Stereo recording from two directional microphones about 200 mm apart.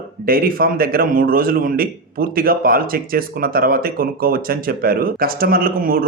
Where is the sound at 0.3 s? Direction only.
45° right (ahead or behind).